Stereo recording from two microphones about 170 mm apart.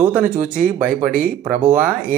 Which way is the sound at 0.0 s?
10° right (ahead or behind).